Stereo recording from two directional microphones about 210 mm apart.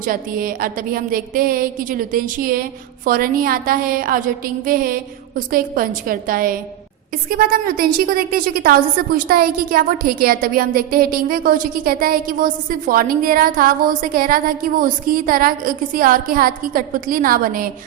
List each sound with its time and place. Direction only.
0.0 s a woman's voice: 40° right (ahead or behind)